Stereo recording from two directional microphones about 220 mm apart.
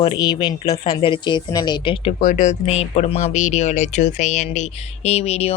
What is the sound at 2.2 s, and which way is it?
Speech, 35° left (ahead or behind).